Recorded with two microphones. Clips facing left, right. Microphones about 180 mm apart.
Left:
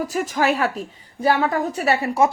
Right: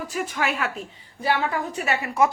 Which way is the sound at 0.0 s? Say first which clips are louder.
Left 6 dB; 40° left (ahead or behind).